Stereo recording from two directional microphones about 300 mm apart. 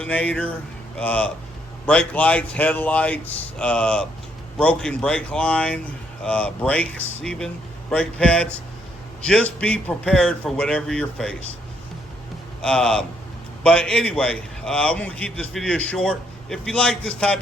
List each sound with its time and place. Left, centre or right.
0.0 s a man's voice: centre
12.6 s a man's voice: centre